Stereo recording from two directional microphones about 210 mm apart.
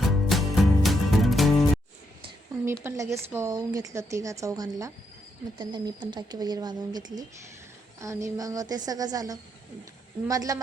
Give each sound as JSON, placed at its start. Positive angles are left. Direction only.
{"t": 0.0, "sound": "music", "side_deg": 0}
{"t": 2.6, "sound": "speech", "side_deg": -15}